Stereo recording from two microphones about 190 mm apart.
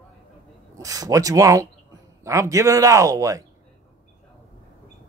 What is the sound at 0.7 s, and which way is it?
A man's voice, 20° right (ahead or behind).